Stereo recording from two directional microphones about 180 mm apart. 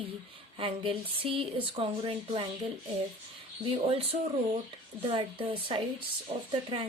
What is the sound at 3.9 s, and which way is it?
A woman's voice, 35° right (ahead or behind).